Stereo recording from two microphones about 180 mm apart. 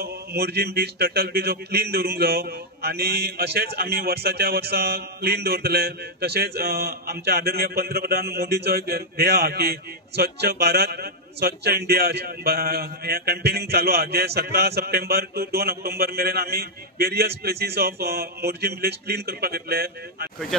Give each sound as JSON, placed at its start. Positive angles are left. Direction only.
{"t": 0.0, "sound": "speech", "side_deg": -60}